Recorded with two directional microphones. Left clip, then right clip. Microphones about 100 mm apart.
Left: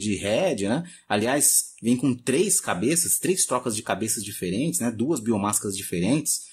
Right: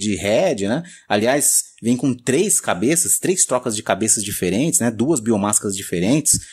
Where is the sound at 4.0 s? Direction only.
60° right (ahead or behind).